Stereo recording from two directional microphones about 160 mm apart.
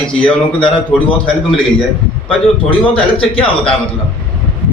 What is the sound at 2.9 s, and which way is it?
Speech, 35° left (ahead or behind).